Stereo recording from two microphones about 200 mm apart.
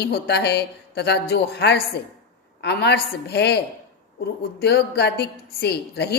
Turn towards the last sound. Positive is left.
turn(degrees=55)  # may be behind; listen again after turning